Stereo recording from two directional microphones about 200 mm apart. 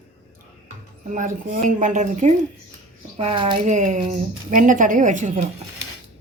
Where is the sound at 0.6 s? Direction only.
40° right (ahead or behind).